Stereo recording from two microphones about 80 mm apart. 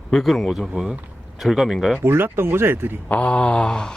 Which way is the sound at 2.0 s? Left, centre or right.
Right.